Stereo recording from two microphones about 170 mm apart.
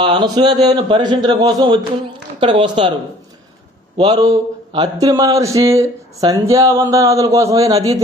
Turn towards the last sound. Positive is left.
turn(degrees=-20)  # may be behind; listen again after turning